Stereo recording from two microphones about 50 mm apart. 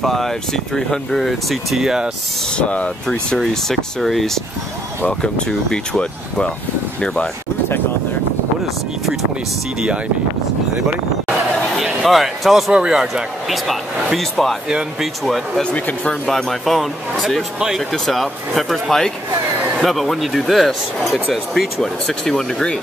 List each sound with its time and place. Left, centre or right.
0.0 s speech: centre
2.5 s speech: left
3.3 s speech: centre
5.2 s speech: centre
11.8 s speech: centre
12.7 s speech: centre
13.7 s speech: centre
14.7 s speech: centre
15.2 s speech: centre
22.2 s speech: centre